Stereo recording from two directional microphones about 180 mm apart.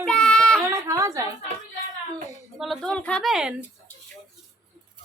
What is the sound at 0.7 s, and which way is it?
Speech, 15° right (ahead or behind).